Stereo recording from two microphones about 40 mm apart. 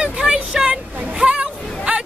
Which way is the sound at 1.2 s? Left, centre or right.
Right.